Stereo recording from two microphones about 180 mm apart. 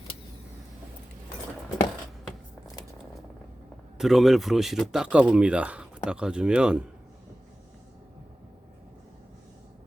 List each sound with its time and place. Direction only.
3.9 s speech: centre (ahead or behind)